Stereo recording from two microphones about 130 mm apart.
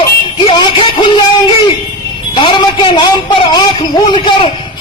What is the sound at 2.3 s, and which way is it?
A man's voice, 40° left (ahead or behind).